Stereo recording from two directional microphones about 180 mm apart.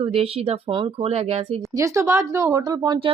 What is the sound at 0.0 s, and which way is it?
Speech, 30° right (ahead or behind).